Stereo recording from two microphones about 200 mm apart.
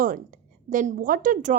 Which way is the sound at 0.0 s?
40° right (ahead or behind).